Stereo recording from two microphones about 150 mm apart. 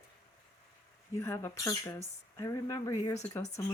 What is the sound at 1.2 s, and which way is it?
Speech, 15° left (ahead or behind).